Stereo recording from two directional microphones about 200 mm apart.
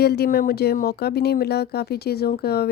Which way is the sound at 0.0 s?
55° left (ahead or behind).